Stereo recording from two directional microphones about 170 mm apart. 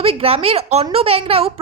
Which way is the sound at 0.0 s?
35° right (ahead or behind).